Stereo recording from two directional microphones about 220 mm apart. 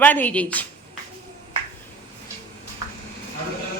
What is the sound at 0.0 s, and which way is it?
Speech, 5° left (ahead or behind).